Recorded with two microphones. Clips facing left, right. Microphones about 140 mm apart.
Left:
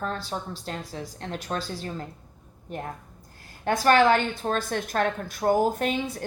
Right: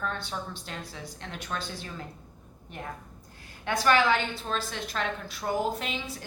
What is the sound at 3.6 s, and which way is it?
A woman's voice, 45° left (ahead or behind).